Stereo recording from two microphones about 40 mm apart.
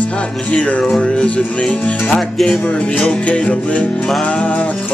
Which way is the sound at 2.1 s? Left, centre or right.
Centre.